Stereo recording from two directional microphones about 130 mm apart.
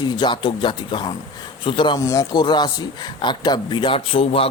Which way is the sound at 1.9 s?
25° left (ahead or behind).